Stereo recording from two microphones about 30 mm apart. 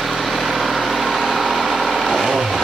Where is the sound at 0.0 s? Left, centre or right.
Centre.